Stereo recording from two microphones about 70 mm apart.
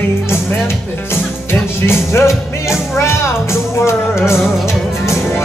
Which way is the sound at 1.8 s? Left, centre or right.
Left.